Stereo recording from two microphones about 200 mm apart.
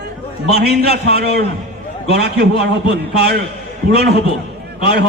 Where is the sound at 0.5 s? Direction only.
55° right (ahead or behind).